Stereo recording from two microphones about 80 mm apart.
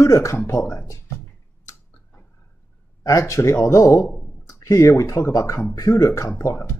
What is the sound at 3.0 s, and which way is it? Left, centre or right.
Speech, left.